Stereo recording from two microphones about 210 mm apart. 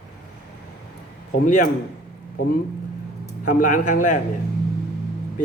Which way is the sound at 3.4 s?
40° left (ahead or behind).